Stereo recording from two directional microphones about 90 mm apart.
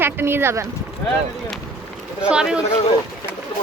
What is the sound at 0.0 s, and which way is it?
Speech, 25° right (ahead or behind).